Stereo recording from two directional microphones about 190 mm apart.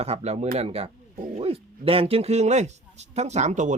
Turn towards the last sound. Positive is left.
turn(degrees=-40)  # may be behind; listen again after turning